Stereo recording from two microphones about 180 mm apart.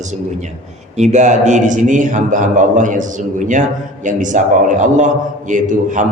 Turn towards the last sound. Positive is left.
turn(degrees=-45)  # may be behind; listen again after turning